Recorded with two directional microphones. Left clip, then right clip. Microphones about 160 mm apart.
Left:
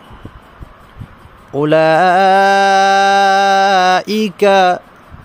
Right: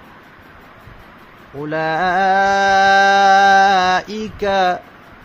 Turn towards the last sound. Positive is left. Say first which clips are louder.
# left 6 dB
turn(degrees=50)  # may be behind; listen again after turning